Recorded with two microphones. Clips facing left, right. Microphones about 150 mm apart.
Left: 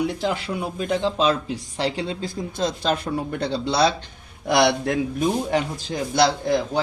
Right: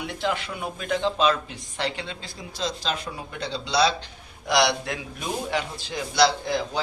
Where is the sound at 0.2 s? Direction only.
35° left (ahead or behind).